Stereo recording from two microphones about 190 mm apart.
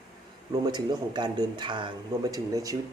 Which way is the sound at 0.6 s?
20° right (ahead or behind).